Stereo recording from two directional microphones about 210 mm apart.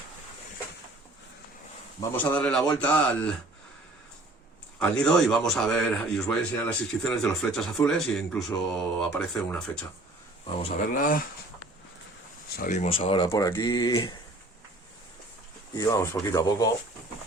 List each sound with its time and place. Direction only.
2.0 s speech: 10° left (ahead or behind)
4.8 s speech: 5° left (ahead or behind)
10.6 s speech: 30° left (ahead or behind)
12.5 s speech: 35° left (ahead or behind)
13.3 s speech: 15° left (ahead or behind)
15.7 s speech: 15° left (ahead or behind)